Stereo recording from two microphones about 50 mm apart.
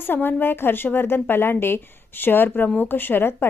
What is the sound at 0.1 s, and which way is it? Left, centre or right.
A woman's voice, left.